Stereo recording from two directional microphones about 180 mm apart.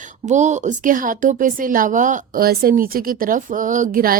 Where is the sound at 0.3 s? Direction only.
40° right (ahead or behind).